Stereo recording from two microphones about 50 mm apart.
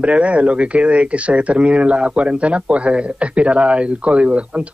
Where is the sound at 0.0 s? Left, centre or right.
Right.